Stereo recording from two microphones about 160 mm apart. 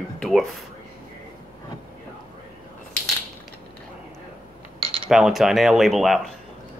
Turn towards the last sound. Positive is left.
turn(degrees=0)  # may be behind; listen again after turning